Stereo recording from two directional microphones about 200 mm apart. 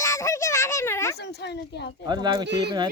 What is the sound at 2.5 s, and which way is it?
Speech, 55° right (ahead or behind).